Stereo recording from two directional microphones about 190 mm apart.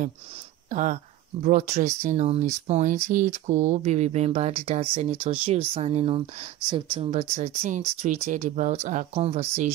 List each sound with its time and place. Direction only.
0.7 s speech: 40° right (ahead or behind)